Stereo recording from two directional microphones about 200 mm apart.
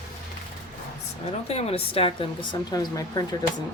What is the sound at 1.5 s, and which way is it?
Speech, 30° left (ahead or behind).